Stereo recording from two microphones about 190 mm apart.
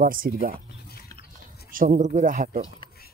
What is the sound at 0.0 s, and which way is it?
Speech, 50° right (ahead or behind).